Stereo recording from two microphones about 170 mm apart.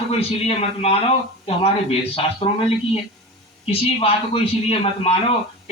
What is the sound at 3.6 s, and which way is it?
A man's voice, 35° left (ahead or behind).